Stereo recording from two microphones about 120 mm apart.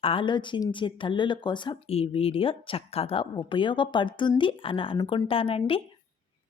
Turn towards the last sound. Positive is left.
turn(degrees=50)  # may be behind; listen again after turning